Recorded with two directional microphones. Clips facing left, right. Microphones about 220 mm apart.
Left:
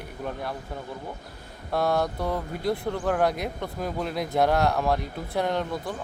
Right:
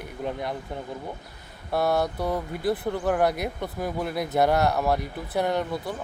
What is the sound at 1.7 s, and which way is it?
Speech, 5° right (ahead or behind).